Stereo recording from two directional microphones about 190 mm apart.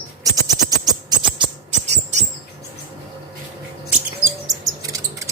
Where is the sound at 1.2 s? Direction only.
25° right (ahead or behind).